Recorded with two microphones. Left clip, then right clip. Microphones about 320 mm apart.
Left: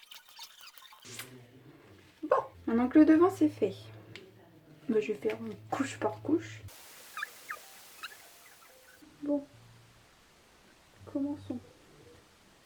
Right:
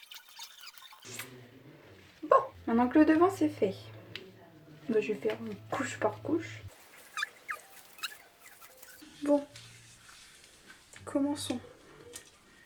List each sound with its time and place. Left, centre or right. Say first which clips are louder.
0.1 s a sound: right 1 dB; centre
2.3 s speech: right 4 dB; centre
4.9 s speech: even; centre
7.1 s fowl: right 3 dB; centre
8.0 s rodents: right 5 dB; centre
11.0 s speech: right 4 dB; right